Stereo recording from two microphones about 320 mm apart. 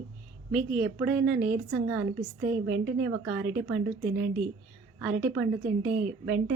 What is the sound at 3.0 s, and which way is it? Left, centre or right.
Speech, centre.